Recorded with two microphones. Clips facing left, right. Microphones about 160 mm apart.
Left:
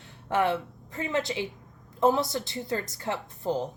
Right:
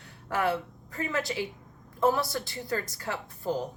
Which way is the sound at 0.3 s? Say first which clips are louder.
Left 3 dB; 20° left (ahead or behind).